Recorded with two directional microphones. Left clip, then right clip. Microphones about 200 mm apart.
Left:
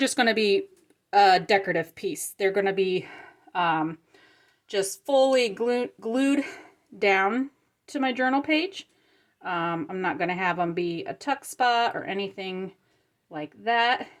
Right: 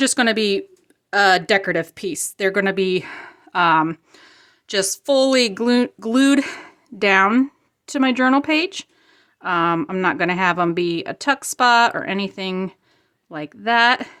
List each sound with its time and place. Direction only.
0.0 s a woman's voice: 20° right (ahead or behind)